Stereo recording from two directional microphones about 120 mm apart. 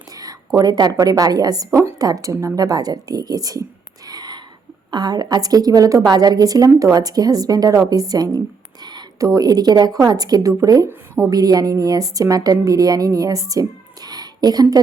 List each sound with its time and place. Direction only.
0.1 s a woman's voice: 30° right (ahead or behind)